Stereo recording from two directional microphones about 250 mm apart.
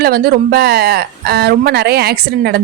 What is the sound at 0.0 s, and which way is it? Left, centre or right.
Speech, right.